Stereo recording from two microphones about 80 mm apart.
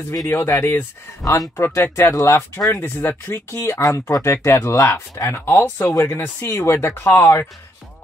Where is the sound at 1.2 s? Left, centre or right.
Left.